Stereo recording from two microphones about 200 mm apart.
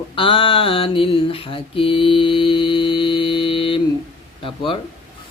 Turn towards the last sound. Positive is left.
turn(degrees=25)  # may be behind; listen again after turning